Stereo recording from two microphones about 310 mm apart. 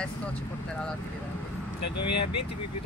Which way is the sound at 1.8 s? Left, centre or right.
Left.